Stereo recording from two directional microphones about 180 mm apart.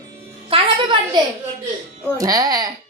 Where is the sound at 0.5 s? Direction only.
25° right (ahead or behind).